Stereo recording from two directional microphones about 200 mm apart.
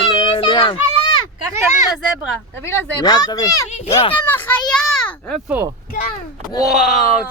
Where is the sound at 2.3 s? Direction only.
10° left (ahead or behind).